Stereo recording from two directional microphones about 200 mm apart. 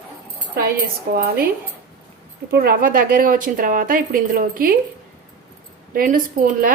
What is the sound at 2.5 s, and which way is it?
A woman's voice, 50° right (ahead or behind).